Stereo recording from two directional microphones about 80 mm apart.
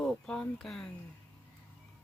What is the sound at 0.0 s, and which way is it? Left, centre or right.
Speech, centre.